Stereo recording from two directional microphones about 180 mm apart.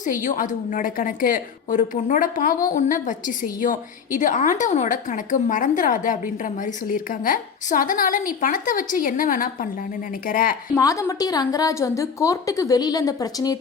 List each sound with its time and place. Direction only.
0.3 s a woman's voice: 45° left (ahead or behind)
10.8 s a woman's voice: 20° left (ahead or behind)